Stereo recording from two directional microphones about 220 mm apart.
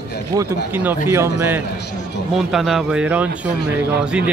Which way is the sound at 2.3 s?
Centre (ahead or behind).